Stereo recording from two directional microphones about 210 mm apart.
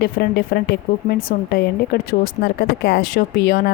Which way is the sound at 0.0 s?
50° left (ahead or behind).